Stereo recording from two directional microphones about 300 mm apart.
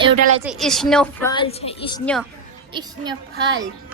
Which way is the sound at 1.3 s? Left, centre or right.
Centre.